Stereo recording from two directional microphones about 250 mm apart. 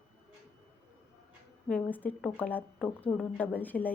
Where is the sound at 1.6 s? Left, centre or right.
Centre.